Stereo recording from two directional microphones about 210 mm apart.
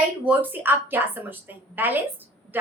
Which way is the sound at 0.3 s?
10° right (ahead or behind).